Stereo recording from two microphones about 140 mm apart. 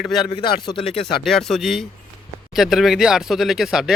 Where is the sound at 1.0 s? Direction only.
Centre (ahead or behind).